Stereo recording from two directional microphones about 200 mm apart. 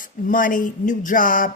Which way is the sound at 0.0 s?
45° left (ahead or behind).